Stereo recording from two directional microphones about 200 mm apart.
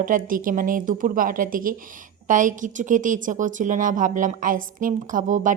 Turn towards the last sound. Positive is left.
turn(degrees=-40)  # may be behind; listen again after turning